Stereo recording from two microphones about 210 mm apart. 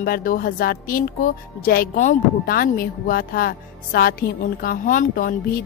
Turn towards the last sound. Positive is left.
turn(degrees=40)  # may be behind; listen again after turning